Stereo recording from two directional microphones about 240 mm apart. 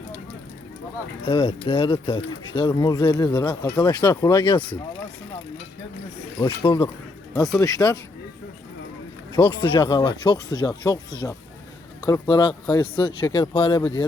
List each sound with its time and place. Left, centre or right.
1.2 s speech: left
6.4 s speech: centre
9.3 s speech: centre